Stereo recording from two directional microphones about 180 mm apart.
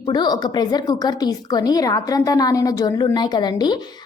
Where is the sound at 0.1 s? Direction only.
25° left (ahead or behind).